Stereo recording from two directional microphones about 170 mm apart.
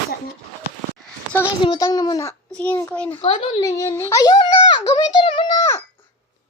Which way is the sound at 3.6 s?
20° left (ahead or behind).